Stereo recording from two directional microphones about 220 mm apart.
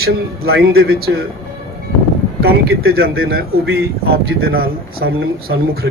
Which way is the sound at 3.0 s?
45° right (ahead or behind).